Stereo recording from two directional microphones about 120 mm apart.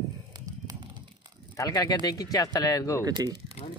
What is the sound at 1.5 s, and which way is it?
Speech, 30° left (ahead or behind).